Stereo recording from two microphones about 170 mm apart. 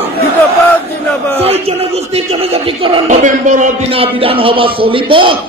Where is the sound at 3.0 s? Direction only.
45° right (ahead or behind).